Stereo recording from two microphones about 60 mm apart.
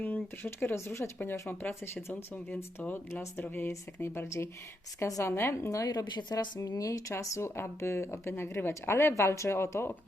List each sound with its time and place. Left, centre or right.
0.0 s speech: left
1.2 s a woman's voice: left
5.3 s speech: left
5.5 s a woman's voice: left
5.8 s speech: left
7.1 s a woman's voice: left